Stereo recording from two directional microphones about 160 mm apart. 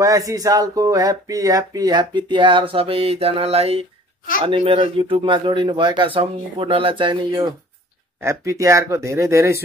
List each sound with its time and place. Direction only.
0.0 s a man's voice: 20° right (ahead or behind)